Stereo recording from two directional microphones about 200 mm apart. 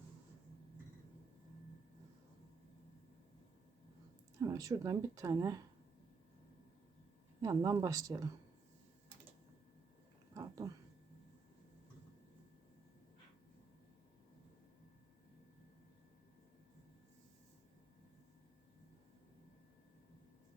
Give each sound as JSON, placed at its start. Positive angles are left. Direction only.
{"t": 4.4, "sound": "speech", "side_deg": -15}
{"t": 7.4, "sound": "speech", "side_deg": -20}
{"t": 10.3, "sound": "a sound", "side_deg": -15}